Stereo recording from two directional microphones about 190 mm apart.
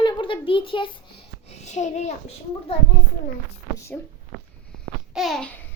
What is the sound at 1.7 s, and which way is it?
Speech, 40° left (ahead or behind).